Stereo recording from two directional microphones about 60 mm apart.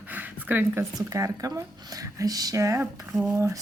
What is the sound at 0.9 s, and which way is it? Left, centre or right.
Speech, right.